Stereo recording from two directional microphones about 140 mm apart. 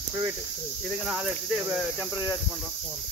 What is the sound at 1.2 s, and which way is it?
Speech, 10° right (ahead or behind).